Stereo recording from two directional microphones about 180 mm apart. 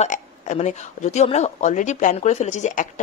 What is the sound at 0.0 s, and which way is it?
Speech, 40° left (ahead or behind).